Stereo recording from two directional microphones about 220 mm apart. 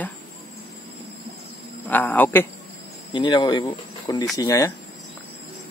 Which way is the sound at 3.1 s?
20° left (ahead or behind).